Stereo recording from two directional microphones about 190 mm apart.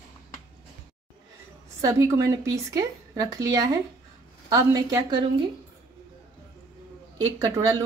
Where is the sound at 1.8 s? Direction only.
15° right (ahead or behind).